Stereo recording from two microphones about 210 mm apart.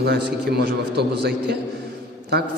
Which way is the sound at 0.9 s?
50° right (ahead or behind).